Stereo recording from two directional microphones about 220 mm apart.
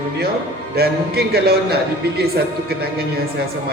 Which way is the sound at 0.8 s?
45° right (ahead or behind).